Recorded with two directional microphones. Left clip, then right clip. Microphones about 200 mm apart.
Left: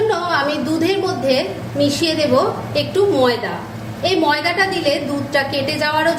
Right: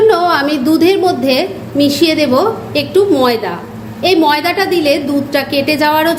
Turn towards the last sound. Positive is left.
turn(degrees=-45)  # may be behind; listen again after turning